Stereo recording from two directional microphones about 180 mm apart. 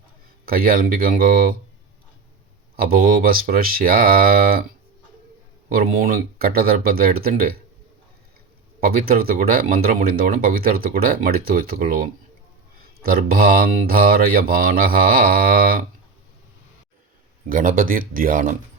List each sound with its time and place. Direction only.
0.4 s speech: 55° right (ahead or behind)
2.7 s speech: 55° right (ahead or behind)
5.6 s speech: 55° right (ahead or behind)
8.8 s speech: 55° right (ahead or behind)
17.5 s speech: 50° right (ahead or behind)